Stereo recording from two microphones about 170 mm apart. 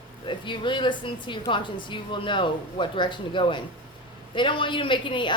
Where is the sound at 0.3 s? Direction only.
30° left (ahead or behind).